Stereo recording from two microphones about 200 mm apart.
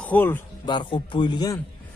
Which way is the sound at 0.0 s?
10° left (ahead or behind).